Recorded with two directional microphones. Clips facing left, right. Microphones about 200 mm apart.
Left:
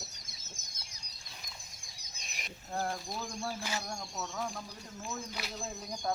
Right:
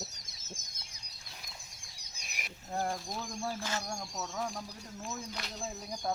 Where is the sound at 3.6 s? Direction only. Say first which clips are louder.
Right 1 dB; 10° left (ahead or behind).